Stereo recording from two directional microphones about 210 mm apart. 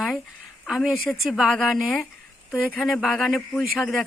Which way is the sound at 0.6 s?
Centre (ahead or behind).